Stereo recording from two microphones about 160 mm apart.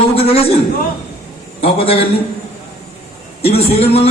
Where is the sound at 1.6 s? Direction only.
35° left (ahead or behind).